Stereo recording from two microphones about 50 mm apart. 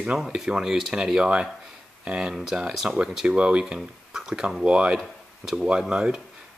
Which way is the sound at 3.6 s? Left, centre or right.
Centre.